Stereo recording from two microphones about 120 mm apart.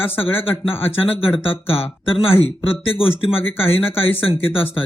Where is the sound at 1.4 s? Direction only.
50° left (ahead or behind).